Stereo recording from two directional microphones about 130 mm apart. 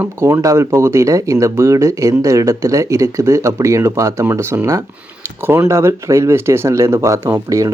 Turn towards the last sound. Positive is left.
turn(degrees=-25)  # may be behind; listen again after turning